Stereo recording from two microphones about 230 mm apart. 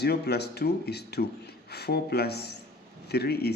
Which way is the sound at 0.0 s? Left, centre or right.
Left.